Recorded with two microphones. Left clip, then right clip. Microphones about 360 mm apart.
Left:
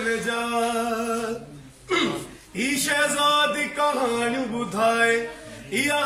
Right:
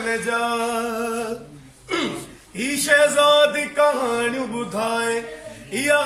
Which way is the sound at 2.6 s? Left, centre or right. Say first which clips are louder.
Right 6 dB; centre.